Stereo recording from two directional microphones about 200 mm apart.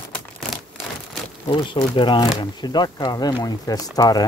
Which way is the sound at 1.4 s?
25° left (ahead or behind).